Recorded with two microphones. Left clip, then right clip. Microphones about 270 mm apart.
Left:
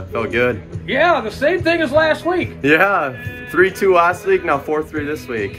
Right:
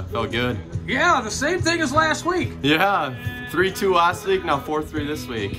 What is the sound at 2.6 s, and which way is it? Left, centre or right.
Speech, centre.